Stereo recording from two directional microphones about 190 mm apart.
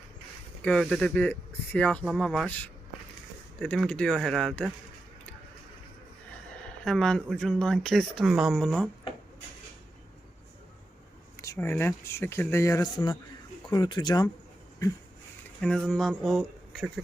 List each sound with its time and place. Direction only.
0.6 s speech: 5° left (ahead or behind)
6.8 s speech: 5° left (ahead or behind)
11.3 s speech: 15° left (ahead or behind)
15.6 s speech: 5° left (ahead or behind)